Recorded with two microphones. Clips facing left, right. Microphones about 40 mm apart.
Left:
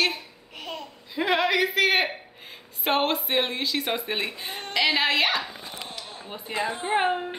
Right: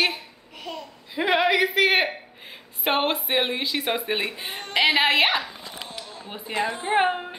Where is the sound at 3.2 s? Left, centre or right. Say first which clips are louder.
Right 1 dB; centre.